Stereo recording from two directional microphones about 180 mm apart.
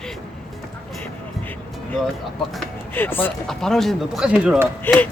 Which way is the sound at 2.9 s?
10° left (ahead or behind).